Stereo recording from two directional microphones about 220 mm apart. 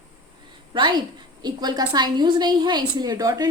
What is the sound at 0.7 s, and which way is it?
A woman's voice, 20° right (ahead or behind).